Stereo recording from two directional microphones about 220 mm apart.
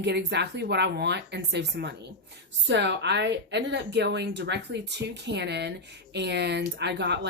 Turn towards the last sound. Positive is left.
turn(degrees=-50)  # may be behind; listen again after turning